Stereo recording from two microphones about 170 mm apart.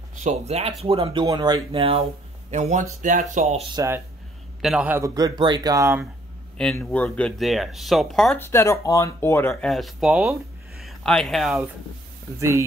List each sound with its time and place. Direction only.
0.2 s speech: 40° right (ahead or behind)
2.5 s speech: 45° right (ahead or behind)
3.7 s speech: 15° right (ahead or behind)
4.6 s speech: 5° right (ahead or behind)
6.6 s speech: 5° left (ahead or behind)
8.4 s speech: 15° left (ahead or behind)
9.5 s speech: centre (ahead or behind)
12.4 s speech: 15° right (ahead or behind)